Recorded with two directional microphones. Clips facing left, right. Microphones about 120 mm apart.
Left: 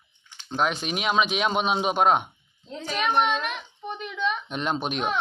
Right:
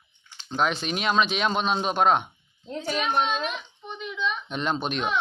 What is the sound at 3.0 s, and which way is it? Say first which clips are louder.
Speech: left 4 dB; 60° left (ahead or behind).